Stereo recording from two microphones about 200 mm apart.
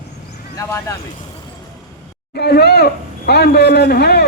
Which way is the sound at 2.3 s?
55° left (ahead or behind).